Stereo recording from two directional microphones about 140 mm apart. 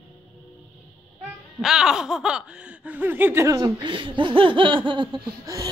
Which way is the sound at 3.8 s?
35° right (ahead or behind).